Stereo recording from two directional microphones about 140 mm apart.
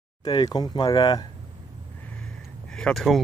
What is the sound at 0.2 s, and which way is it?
Speech, 30° left (ahead or behind).